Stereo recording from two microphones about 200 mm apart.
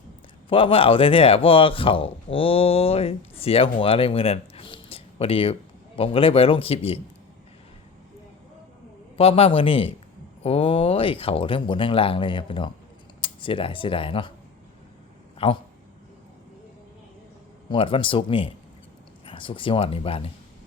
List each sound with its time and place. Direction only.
0.5 s speech: 25° left (ahead or behind)
9.1 s speech: 30° left (ahead or behind)
15.4 s speech: 30° left (ahead or behind)
17.7 s speech: 25° left (ahead or behind)